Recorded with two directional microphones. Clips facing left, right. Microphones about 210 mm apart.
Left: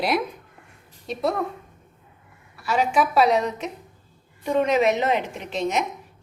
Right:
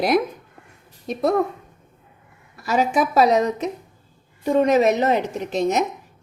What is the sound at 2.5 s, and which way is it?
A woman's voice, 40° right (ahead or behind).